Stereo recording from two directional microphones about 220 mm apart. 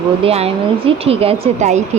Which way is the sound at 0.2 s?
25° right (ahead or behind).